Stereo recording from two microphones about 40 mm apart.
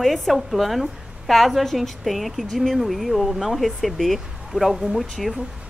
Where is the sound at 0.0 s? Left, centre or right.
Centre.